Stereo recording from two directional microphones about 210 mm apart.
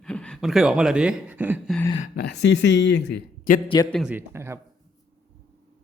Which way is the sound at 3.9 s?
5° right (ahead or behind).